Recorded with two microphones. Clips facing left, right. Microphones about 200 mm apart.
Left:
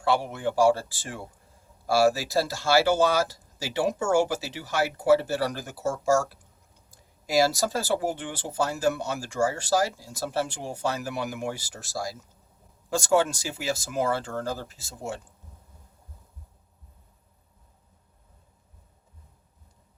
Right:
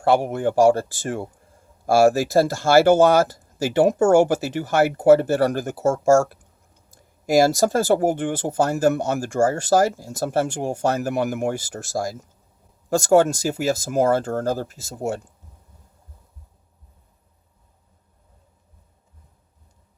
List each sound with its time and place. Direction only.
0.0 s speech: 45° right (ahead or behind)